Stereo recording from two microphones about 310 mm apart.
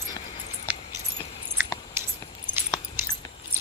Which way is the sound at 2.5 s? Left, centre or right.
Centre.